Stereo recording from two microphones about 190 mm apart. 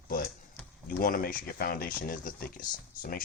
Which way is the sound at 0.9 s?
50° left (ahead or behind).